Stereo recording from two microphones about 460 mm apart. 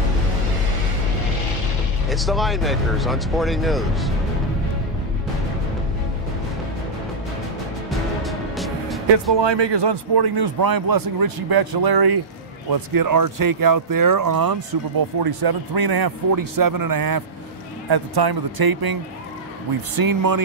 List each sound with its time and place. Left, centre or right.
2.0 s speech: centre
8.2 s music: centre
9.1 s speech: right
20.0 s speech: right